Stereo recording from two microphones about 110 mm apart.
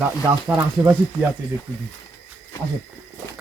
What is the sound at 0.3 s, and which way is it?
Speech, 35° right (ahead or behind).